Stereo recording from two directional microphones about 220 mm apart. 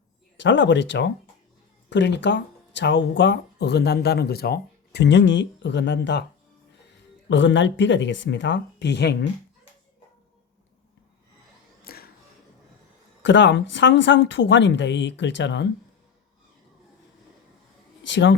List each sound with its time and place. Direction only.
0.3 s speech: 55° left (ahead or behind)
11.8 s music: 45° left (ahead or behind)
13.2 s speech: 55° left (ahead or behind)
18.1 s speech: 55° left (ahead or behind)